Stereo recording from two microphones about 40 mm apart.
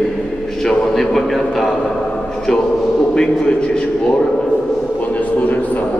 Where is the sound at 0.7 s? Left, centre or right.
Centre.